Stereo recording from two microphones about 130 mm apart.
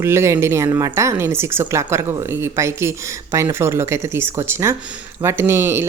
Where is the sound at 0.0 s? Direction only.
20° right (ahead or behind).